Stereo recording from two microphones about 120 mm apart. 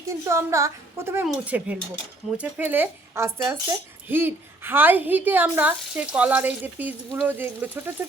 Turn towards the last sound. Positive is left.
turn(degrees=-15)  # may be behind; listen again after turning